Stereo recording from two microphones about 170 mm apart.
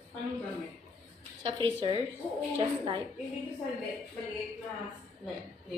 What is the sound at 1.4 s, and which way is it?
A woman's voice, 30° right (ahead or behind).